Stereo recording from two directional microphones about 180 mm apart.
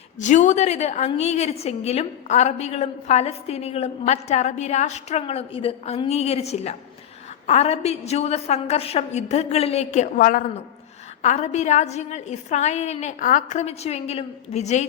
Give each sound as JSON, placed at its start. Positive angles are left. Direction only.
{"t": 0.2, "sound": "a woman's voice", "side_deg": 45}